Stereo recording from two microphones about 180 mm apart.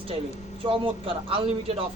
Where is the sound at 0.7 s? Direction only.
30° right (ahead or behind).